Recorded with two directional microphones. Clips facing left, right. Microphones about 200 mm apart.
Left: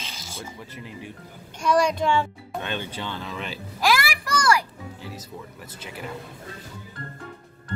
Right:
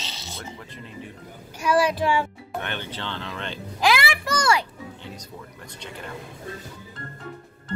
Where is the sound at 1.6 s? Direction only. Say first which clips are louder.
Even; 5° right (ahead or behind).